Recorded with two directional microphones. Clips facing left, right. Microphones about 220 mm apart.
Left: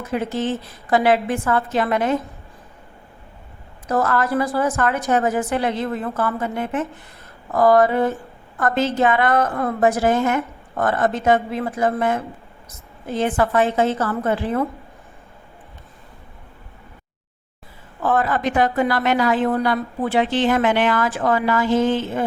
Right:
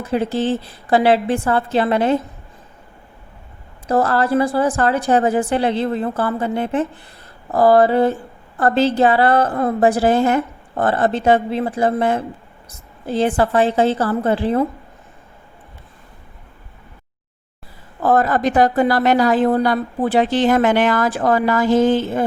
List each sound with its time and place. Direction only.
0.0 s a woman's voice: 30° right (ahead or behind)
3.8 s a woman's voice: 30° right (ahead or behind)
18.0 s a woman's voice: 40° right (ahead or behind)